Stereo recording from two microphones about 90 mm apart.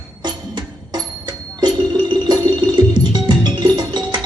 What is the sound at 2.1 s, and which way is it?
Music, 55° right (ahead or behind).